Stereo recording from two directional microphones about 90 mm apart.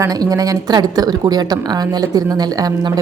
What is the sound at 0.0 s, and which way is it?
A woman's voice, 40° right (ahead or behind).